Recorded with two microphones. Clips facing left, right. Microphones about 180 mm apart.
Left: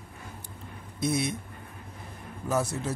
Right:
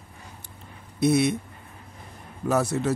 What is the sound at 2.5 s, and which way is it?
Speech, 70° right (ahead or behind).